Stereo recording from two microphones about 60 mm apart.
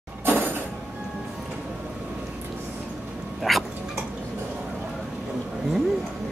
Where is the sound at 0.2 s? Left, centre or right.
Right.